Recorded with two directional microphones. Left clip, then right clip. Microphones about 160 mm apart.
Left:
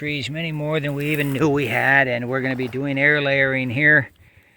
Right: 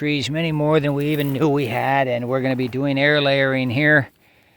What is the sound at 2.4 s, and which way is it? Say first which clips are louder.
Speech: right 2 dB; 45° right (ahead or behind).